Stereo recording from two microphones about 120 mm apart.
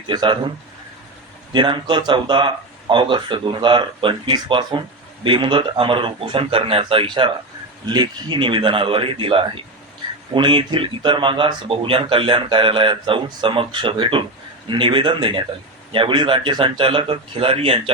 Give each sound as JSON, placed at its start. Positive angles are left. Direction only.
{"t": 0.1, "sound": "a man's voice", "side_deg": -40}
{"t": 1.5, "sound": "speech", "side_deg": -40}